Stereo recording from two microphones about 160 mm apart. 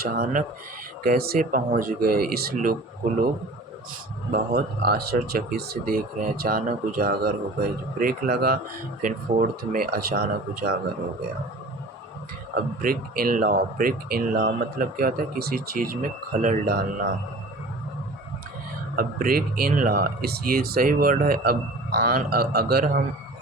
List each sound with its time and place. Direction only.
0.0 s speech: 65° right (ahead or behind)
4.3 s speech: 75° right (ahead or behind)
9.0 s speech: 55° right (ahead or behind); by 10.8 s 80° right
12.5 s speech: 65° right (ahead or behind)
18.9 s speech: 65° right (ahead or behind)